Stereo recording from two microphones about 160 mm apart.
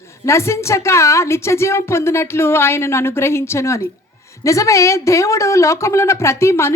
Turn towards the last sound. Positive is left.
turn(degrees=15)  # may be behind; listen again after turning